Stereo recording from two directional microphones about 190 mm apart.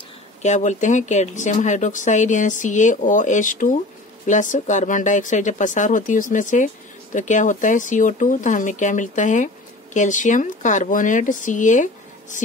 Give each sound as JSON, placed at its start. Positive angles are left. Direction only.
{"t": 0.4, "sound": "speech", "side_deg": 40}